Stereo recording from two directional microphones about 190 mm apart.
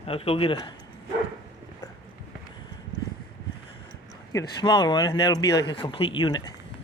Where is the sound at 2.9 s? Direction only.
20° right (ahead or behind).